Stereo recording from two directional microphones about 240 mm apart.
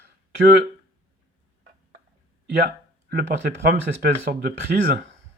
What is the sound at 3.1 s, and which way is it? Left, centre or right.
Speech, right.